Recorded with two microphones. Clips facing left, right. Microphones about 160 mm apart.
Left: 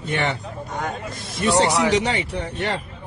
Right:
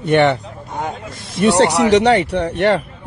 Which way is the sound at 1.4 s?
70° right (ahead or behind).